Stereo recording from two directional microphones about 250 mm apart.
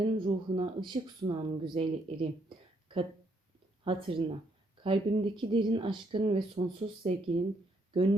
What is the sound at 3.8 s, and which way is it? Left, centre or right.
A woman's voice, right.